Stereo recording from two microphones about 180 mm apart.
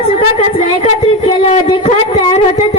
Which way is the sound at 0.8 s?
35° left (ahead or behind).